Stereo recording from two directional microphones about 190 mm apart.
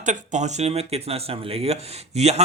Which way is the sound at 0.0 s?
40° right (ahead or behind).